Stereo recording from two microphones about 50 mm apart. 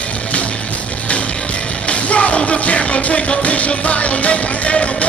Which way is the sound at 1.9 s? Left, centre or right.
Left.